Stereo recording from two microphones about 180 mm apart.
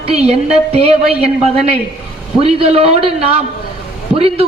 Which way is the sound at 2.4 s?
35° right (ahead or behind).